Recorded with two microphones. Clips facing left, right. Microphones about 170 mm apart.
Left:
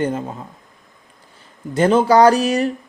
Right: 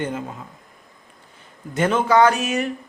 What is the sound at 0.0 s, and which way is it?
Speech, 35° left (ahead or behind).